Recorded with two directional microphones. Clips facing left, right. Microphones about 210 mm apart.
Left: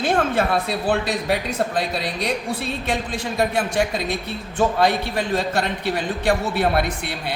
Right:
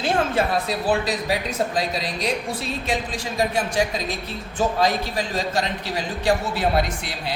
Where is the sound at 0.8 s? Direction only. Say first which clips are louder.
Left 1 dB; 60° left (ahead or behind).